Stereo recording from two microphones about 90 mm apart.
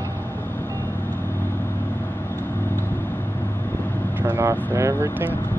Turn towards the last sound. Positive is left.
turn(degrees=-35)  # may be behind; listen again after turning